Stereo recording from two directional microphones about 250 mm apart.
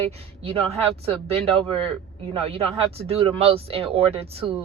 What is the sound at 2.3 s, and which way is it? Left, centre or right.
Speech, right.